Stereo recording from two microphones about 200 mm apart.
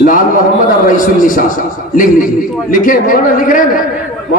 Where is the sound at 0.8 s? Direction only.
40° left (ahead or behind).